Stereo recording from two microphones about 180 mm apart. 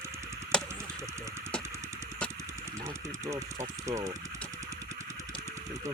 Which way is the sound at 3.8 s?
15° right (ahead or behind).